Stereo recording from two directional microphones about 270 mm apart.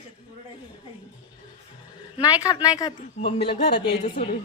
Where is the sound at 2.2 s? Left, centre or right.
Centre.